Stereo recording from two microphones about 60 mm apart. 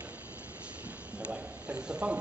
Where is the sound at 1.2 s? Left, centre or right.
Right.